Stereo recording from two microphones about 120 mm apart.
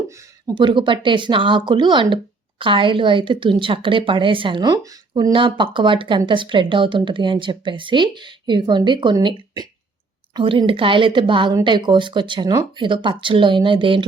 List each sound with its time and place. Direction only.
0.4 s speech: 40° right (ahead or behind)
5.5 s speech: 40° right (ahead or behind)
10.3 s speech: 40° right (ahead or behind)